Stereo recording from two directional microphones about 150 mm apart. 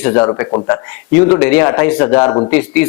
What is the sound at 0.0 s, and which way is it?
A man's voice, 15° left (ahead or behind).